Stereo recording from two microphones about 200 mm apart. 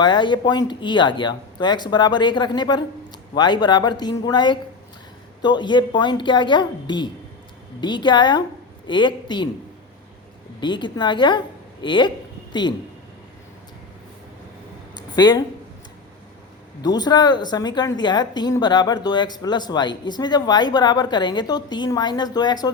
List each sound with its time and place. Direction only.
0.0 s speech: 25° left (ahead or behind)
10.6 s a woman's voice: 25° left (ahead or behind)
14.9 s a sound: 20° left (ahead or behind)
16.8 s speech: 20° left (ahead or behind)